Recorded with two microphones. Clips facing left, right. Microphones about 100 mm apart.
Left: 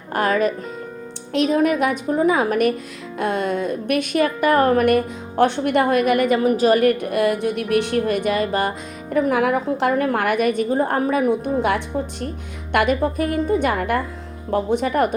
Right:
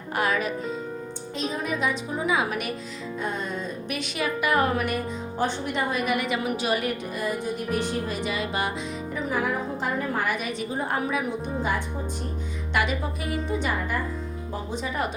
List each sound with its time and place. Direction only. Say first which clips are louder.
0.1 s music: left 7 dB; 45° left (ahead or behind)
1.3 s a woman's voice: left 12 dB; 65° left (ahead or behind); by 2.7 s 50° left (ahead or behind)
3.2 s a woman's voice: left 10 dB; 70° left (ahead or behind); by 8.7 s 45° left (ahead or behind)
9.1 s a woman's voice: left 10 dB; 65° left (ahead or behind)
12.7 s a woman's voice: left 9 dB; 50° left (ahead or behind)